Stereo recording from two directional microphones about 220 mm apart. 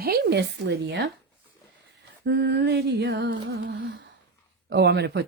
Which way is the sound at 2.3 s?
50° right (ahead or behind).